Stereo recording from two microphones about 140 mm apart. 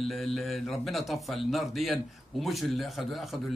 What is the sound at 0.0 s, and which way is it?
Speech, centre (ahead or behind).